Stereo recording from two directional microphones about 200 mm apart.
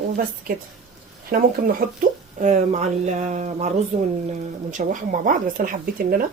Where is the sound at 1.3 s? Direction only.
45° right (ahead or behind).